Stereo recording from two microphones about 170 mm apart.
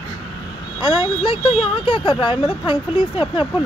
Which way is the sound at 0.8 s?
25° left (ahead or behind).